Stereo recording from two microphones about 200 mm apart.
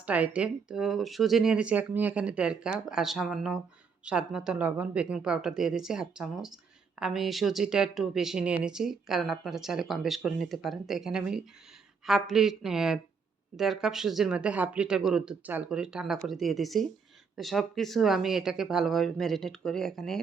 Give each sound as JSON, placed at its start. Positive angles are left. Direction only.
{"t": 0.0, "sound": "speech", "side_deg": -5}